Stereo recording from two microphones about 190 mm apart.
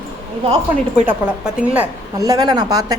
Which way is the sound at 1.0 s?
10° right (ahead or behind).